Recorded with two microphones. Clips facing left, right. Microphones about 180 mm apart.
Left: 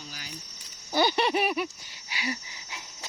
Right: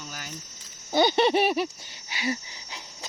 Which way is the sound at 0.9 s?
25° right (ahead or behind).